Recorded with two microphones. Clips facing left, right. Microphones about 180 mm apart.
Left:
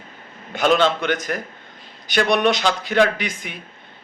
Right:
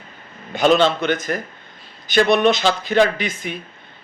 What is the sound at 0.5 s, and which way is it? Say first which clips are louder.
A man's voice: right 2 dB; 10° left (ahead or behind).